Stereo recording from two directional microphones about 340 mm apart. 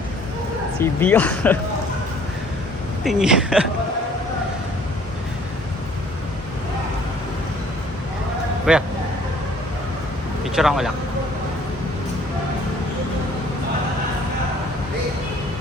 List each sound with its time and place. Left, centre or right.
0.8 s speech: centre
3.0 s speech: centre
8.7 s speech: centre
10.4 s speech: centre